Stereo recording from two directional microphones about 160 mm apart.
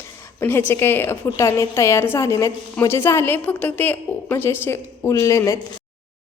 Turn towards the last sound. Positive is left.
turn(degrees=20)  # may be behind; listen again after turning